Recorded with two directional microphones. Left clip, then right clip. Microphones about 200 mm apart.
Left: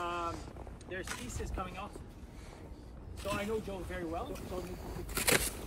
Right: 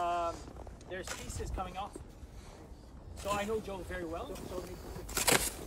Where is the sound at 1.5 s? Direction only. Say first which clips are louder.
Right 3 dB; 50° right (ahead or behind).